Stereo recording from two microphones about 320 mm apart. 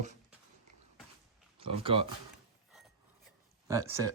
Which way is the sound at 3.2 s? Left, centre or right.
Centre.